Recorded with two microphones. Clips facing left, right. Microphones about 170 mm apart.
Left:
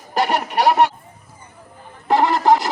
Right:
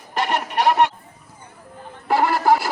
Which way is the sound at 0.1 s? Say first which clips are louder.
Left 3 dB; 40° left (ahead or behind).